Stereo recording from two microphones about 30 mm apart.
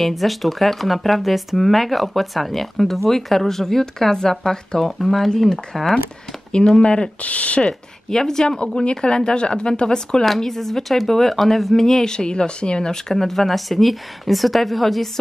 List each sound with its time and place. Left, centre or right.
0.0 s speech: centre
6.5 s speech: left
7.2 s speech: left
7.6 s speech: centre
10.4 s speech: centre
12.1 s speech: left
12.9 s speech: centre